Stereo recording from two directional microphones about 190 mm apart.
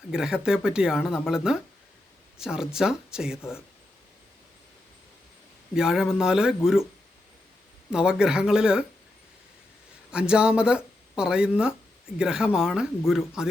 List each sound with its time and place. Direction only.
0.1 s speech: 5° right (ahead or behind)
3.3 s speech: 15° left (ahead or behind)
5.7 s speech: 5° right (ahead or behind)
7.9 s speech: 5° right (ahead or behind)
10.1 s speech: 5° right (ahead or behind)